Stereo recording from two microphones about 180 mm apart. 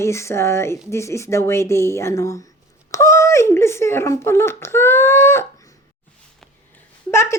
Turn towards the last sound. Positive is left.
turn(degrees=15)  # may be behind; listen again after turning